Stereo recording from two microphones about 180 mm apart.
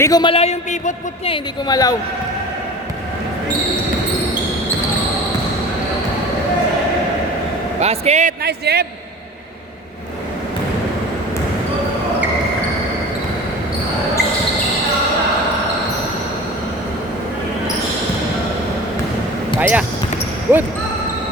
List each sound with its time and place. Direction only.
0.0 s a woman's voice: 25° left (ahead or behind)
7.8 s speech: 35° right (ahead or behind)
8.4 s a man's voice: 65° right (ahead or behind)
19.5 s speech: 10° right (ahead or behind)